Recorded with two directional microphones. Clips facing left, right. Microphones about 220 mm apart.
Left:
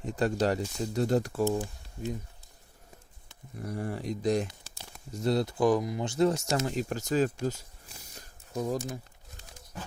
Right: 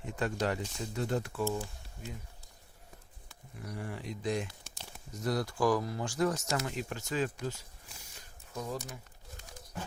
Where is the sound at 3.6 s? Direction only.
40° left (ahead or behind).